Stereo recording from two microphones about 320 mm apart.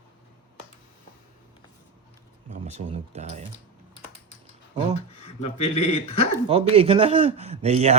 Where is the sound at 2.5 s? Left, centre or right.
Centre.